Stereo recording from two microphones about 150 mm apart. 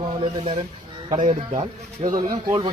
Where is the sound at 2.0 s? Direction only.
40° right (ahead or behind).